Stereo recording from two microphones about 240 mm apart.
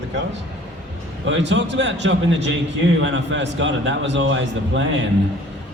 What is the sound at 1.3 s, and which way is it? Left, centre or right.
A man's voice, right.